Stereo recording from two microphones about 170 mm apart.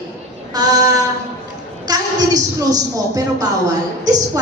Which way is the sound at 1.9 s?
20° right (ahead or behind).